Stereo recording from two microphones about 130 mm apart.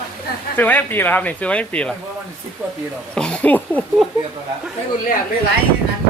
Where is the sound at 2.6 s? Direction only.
20° right (ahead or behind).